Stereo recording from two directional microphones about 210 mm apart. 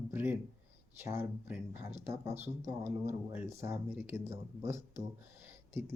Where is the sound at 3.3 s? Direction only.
10° right (ahead or behind).